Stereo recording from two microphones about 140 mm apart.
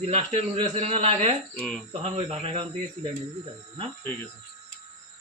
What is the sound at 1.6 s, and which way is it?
Cricket, 5° left (ahead or behind).